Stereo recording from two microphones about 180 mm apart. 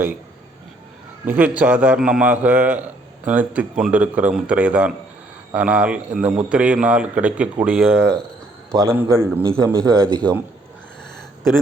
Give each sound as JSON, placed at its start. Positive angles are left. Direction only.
{"t": 1.2, "sound": "a man's voice", "side_deg": -10}
{"t": 8.7, "sound": "a man's voice", "side_deg": -15}
{"t": 9.4, "sound": "a man's voice", "side_deg": -25}